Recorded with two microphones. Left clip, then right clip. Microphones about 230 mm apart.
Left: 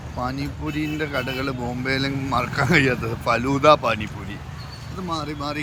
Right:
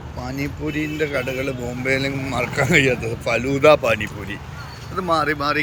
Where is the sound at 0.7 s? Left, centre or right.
Centre.